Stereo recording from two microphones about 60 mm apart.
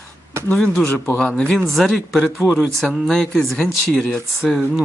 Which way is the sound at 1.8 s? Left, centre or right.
Centre.